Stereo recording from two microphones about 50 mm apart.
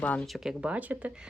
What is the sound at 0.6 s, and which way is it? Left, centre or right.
Speech, right.